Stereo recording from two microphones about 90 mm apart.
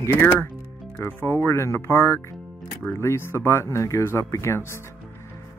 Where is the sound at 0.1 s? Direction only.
25° left (ahead or behind).